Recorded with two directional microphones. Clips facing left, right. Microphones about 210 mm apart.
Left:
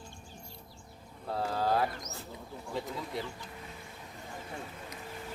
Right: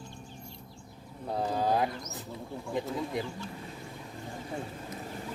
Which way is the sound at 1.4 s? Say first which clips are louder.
Right 2 dB; 15° right (ahead or behind).